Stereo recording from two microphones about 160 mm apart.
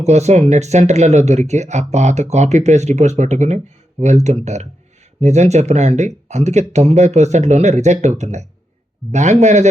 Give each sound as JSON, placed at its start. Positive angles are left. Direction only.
{"t": 0.0, "sound": "speech", "side_deg": -45}